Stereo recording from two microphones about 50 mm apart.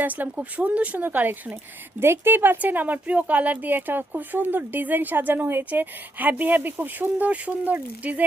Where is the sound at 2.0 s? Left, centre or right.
Right.